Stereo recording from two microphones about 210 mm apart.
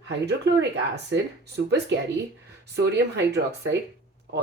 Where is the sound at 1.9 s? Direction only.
55° right (ahead or behind).